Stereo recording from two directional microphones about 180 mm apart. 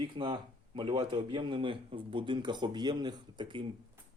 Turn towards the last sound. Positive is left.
turn(degrees=-30)  # may be behind; listen again after turning